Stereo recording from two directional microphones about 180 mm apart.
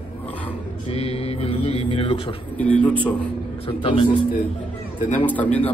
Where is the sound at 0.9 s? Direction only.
35° left (ahead or behind).